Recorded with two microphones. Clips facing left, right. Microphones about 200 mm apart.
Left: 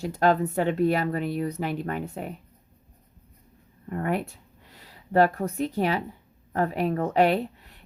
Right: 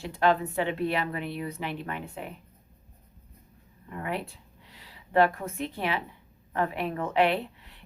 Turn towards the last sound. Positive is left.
turn(degrees=45)  # may be behind; listen again after turning